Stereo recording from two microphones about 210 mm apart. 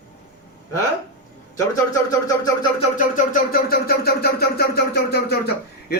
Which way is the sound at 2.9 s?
40° left (ahead or behind).